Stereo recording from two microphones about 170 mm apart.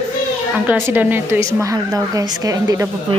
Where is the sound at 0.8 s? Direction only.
10° right (ahead or behind).